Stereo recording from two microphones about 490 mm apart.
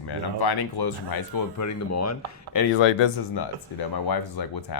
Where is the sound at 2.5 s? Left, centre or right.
Left.